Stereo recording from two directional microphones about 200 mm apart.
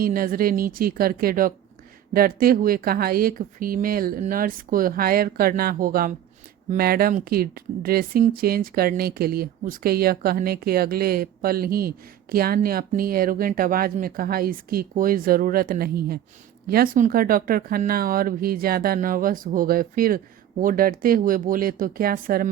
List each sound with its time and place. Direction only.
0.0 s speech: 45° right (ahead or behind)